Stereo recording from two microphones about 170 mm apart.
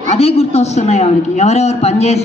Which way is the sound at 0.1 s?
35° left (ahead or behind).